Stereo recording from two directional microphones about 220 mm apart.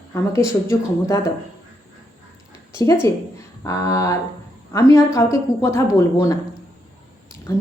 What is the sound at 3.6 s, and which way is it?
A woman's voice, 15° left (ahead or behind).